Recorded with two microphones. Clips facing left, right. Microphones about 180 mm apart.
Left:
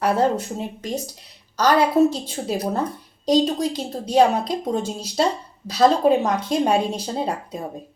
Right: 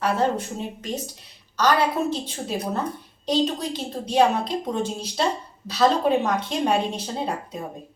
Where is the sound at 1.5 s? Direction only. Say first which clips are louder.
Left 5 dB; 40° left (ahead or behind).